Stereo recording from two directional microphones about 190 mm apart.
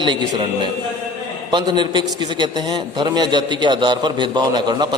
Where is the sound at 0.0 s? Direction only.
25° right (ahead or behind).